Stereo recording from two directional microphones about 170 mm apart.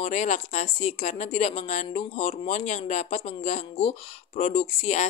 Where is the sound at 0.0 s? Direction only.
45° left (ahead or behind).